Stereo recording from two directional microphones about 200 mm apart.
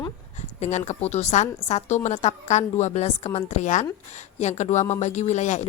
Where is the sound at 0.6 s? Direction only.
35° left (ahead or behind).